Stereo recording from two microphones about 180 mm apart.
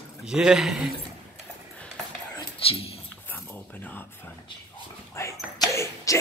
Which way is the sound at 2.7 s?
35° left (ahead or behind).